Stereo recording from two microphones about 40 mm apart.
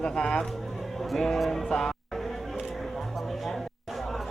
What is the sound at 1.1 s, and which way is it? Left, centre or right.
Speech, centre.